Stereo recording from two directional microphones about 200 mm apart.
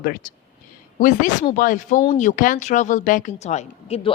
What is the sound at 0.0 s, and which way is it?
Speech, 45° left (ahead or behind).